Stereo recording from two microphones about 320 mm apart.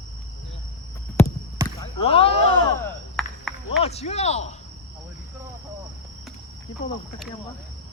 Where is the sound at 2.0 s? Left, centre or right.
Centre.